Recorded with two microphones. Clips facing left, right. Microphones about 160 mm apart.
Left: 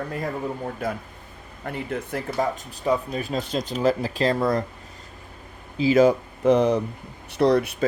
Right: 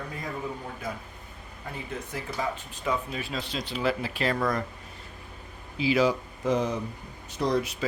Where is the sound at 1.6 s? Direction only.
60° left (ahead or behind).